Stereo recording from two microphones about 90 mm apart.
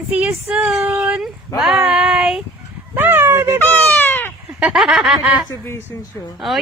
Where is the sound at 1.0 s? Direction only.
5° right (ahead or behind).